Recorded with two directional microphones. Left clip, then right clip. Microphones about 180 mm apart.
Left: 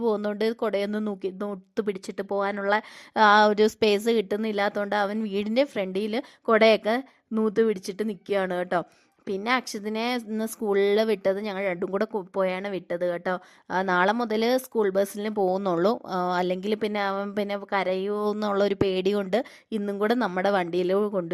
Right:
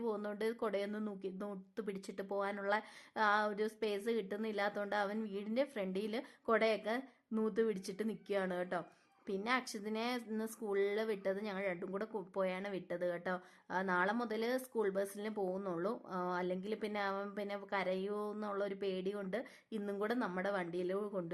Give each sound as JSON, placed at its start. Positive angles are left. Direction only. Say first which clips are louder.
{"t": 0.0, "sound": "speech", "louder": "left 14 dB", "side_deg": 45}